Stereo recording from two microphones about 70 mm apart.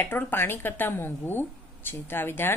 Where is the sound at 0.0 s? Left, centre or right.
Left.